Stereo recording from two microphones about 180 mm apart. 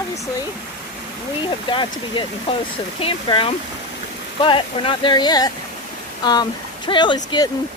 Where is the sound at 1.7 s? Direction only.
25° left (ahead or behind).